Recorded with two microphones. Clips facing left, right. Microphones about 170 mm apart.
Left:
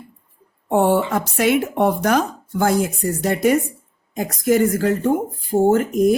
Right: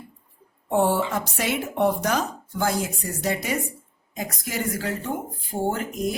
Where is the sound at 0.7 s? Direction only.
60° left (ahead or behind).